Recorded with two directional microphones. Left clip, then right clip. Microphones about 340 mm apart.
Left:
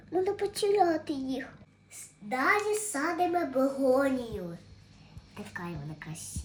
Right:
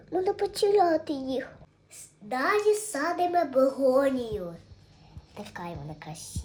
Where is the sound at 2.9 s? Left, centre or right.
Centre.